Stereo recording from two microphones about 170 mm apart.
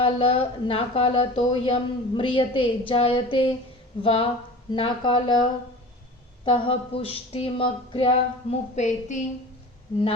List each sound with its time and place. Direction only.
0.0 s speech: 35° left (ahead or behind)